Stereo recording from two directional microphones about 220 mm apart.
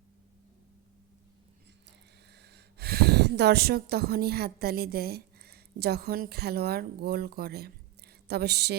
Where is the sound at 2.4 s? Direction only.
50° right (ahead or behind).